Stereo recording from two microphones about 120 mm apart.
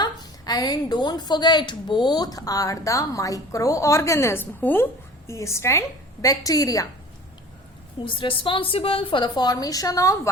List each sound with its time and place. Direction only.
0.0 s a woman's voice: 35° left (ahead or behind)
8.0 s a woman's voice: 45° left (ahead or behind); by 10.2 s 30° left (ahead or behind)